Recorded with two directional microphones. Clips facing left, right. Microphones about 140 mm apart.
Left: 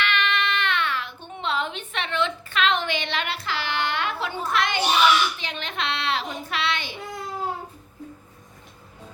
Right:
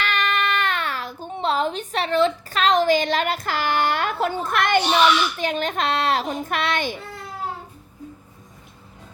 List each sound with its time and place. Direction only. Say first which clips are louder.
0.0 s speech: right 2 dB; 40° right (ahead or behind)